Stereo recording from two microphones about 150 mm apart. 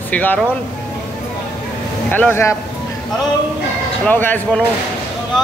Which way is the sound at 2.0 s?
10° left (ahead or behind).